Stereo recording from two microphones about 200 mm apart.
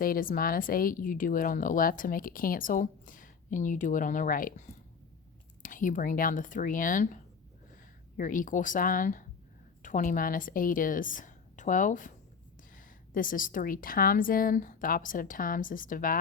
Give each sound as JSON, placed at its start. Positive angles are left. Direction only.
{"t": 0.0, "sound": "a woman's voice", "side_deg": 45}